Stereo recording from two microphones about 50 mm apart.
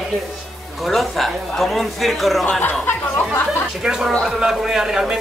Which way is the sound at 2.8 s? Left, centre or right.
Left.